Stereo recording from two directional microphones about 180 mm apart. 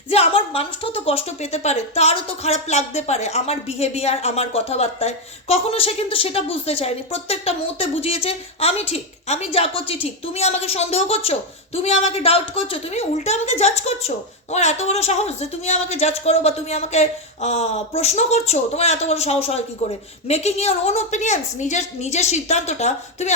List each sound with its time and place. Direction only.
0.1 s a woman's voice: 35° left (ahead or behind)